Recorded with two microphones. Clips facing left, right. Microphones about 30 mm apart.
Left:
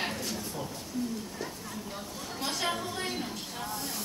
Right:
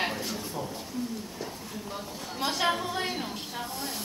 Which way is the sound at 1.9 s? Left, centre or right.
Centre.